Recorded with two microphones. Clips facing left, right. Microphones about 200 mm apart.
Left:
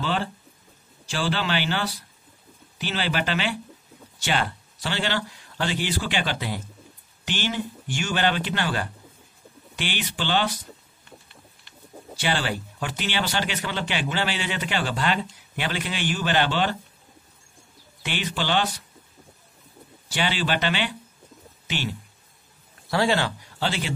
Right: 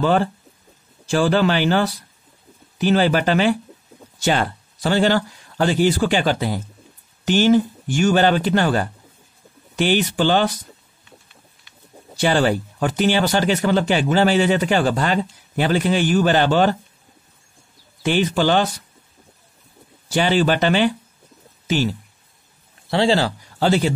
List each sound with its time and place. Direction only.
0.0 s speech: 45° right (ahead or behind)
12.2 s speech: 40° right (ahead or behind)
18.0 s speech: 40° right (ahead or behind)
20.1 s speech: 45° right (ahead or behind)
22.8 s speech: 30° right (ahead or behind)